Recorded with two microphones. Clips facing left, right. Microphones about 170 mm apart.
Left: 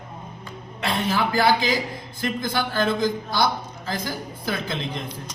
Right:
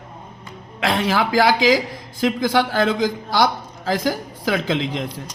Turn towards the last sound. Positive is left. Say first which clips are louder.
# right 7 dB
turn(degrees=-90)